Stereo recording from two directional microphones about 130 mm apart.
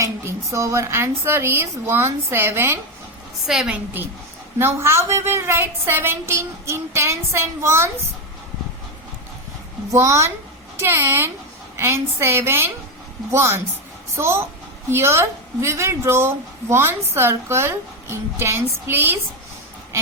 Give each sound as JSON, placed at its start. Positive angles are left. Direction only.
{"t": 0.0, "sound": "a woman's voice", "side_deg": -25}
{"t": 3.4, "sound": "a woman's voice", "side_deg": -5}
{"t": 4.5, "sound": "a woman's voice", "side_deg": -20}
{"t": 9.9, "sound": "a woman's voice", "side_deg": -25}